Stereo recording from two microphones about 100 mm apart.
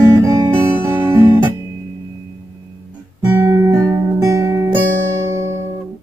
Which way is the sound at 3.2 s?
25° right (ahead or behind).